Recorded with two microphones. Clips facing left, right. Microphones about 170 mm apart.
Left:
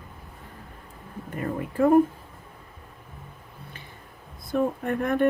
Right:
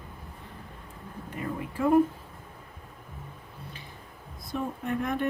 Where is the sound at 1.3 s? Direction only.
50° left (ahead or behind).